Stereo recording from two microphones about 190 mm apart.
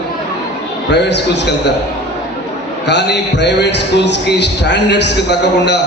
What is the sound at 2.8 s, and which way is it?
A man's voice, 65° left (ahead or behind).